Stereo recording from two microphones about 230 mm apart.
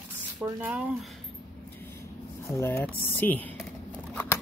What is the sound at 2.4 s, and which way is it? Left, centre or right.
Speech, centre.